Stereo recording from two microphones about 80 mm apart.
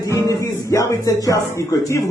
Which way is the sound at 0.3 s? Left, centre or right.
Left.